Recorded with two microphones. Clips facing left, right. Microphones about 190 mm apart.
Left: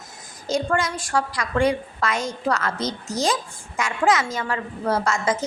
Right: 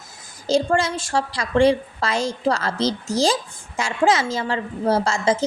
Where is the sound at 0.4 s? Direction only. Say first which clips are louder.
Right 4 dB; 30° right (ahead or behind).